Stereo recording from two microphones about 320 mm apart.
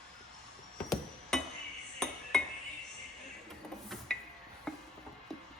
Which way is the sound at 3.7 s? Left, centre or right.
Centre.